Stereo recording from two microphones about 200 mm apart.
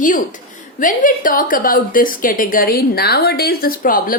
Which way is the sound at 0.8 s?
40° left (ahead or behind).